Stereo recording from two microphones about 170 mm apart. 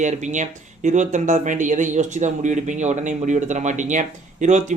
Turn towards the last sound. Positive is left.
turn(degrees=-45)  # may be behind; listen again after turning